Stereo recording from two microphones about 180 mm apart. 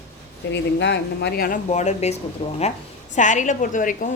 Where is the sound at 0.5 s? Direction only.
75° left (ahead or behind); by 2.6 s 30° left (ahead or behind).